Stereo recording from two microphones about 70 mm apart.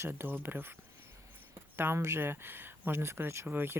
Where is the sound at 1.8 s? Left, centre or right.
Right.